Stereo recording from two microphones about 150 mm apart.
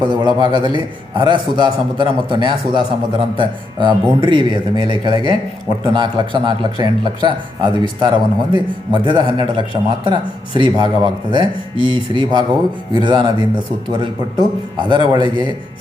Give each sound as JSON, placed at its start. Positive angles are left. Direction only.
{"t": 0.0, "sound": "speech", "side_deg": -30}